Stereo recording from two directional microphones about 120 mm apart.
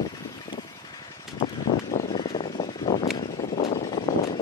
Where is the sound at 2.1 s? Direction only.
40° left (ahead or behind).